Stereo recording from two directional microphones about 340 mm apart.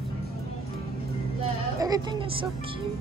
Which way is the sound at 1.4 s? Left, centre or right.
Centre.